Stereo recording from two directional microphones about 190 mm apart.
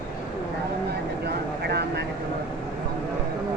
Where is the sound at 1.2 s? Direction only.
60° right (ahead or behind).